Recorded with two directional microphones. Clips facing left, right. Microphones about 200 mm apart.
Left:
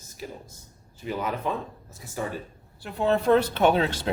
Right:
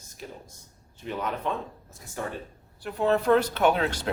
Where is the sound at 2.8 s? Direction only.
25° left (ahead or behind).